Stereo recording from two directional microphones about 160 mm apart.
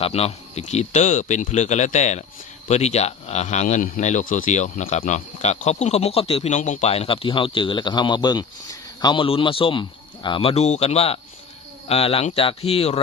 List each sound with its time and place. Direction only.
0.0 s speech: 40° left (ahead or behind)